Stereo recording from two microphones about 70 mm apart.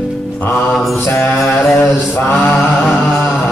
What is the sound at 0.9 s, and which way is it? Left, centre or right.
Mantra, left.